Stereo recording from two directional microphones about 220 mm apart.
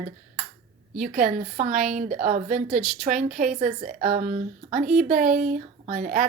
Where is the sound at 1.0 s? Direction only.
40° right (ahead or behind).